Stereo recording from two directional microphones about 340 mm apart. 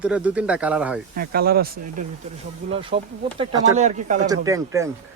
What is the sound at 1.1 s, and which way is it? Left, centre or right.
Speech, right.